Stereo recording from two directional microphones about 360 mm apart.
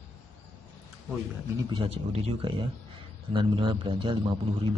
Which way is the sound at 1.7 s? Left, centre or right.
Centre.